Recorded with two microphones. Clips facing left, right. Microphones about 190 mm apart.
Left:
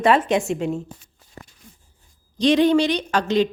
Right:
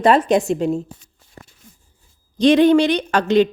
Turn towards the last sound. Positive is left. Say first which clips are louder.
# right 4 dB
turn(degrees=-55)  # may be behind; listen again after turning